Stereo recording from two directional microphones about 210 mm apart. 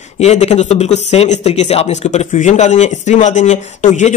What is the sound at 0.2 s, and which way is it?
Speech, 30° left (ahead or behind).